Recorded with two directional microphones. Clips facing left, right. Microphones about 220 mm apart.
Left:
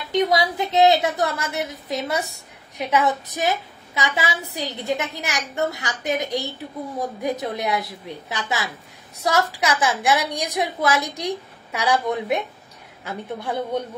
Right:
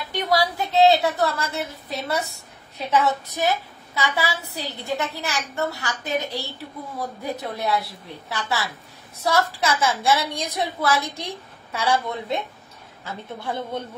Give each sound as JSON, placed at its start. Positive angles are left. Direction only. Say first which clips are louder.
{"t": 0.3, "sound": "a woman's voice", "louder": "left 1 dB", "side_deg": 20}